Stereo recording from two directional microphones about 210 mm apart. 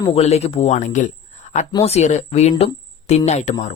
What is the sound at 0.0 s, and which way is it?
Speech, 25° left (ahead or behind).